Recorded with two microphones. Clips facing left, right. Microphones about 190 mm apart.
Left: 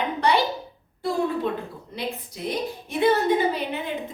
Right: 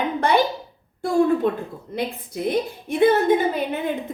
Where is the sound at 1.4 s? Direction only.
50° right (ahead or behind).